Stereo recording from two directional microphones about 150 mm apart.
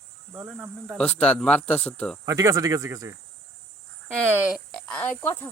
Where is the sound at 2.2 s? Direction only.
20° right (ahead or behind).